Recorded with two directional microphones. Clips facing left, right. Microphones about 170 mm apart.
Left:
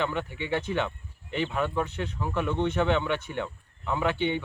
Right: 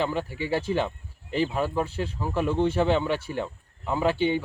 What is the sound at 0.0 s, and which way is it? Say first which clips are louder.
Speech: right 2 dB; 35° right (ahead or behind).